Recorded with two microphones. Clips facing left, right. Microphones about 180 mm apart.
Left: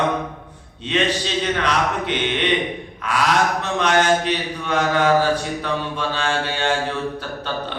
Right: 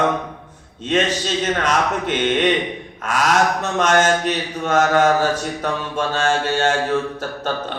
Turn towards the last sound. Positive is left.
turn(degrees=-45)  # may be behind; listen again after turning